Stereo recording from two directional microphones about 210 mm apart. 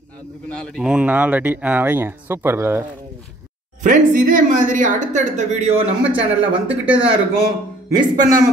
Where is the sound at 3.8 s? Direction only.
40° right (ahead or behind).